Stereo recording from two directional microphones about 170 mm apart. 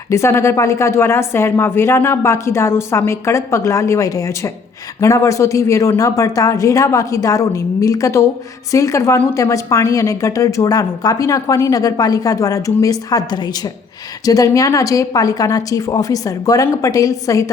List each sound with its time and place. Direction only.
0.1 s a woman's voice: 15° left (ahead or behind)